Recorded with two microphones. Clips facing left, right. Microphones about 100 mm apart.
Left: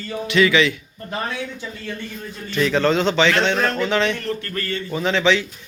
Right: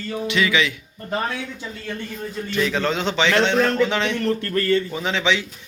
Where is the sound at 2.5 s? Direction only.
5° right (ahead or behind).